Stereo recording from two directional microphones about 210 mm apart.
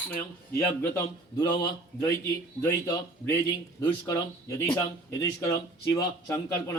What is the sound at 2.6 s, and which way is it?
Speech, 15° left (ahead or behind).